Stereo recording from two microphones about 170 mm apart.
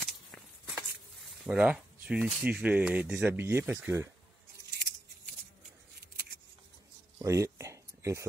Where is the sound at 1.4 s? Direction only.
5° right (ahead or behind).